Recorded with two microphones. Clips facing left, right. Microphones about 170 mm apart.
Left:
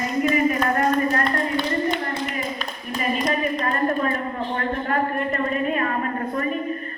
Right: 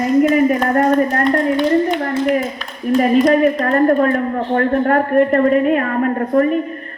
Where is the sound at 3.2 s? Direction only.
60° right (ahead or behind).